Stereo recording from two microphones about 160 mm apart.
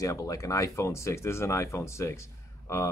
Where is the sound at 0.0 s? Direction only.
20° left (ahead or behind).